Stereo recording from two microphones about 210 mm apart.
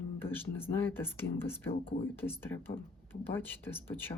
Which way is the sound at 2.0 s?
10° left (ahead or behind).